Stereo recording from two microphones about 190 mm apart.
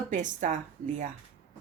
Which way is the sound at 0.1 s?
40° right (ahead or behind).